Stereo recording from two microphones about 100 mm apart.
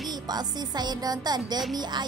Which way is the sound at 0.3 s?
45° right (ahead or behind).